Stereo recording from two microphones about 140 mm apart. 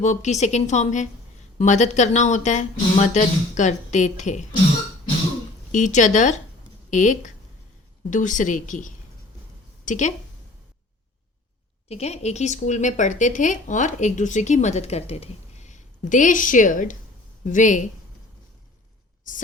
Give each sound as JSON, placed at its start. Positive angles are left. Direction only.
{"t": 0.0, "sound": "a woman's voice", "side_deg": 55}
{"t": 5.7, "sound": "a woman's voice", "side_deg": 60}
{"t": 11.9, "sound": "a woman's voice", "side_deg": 50}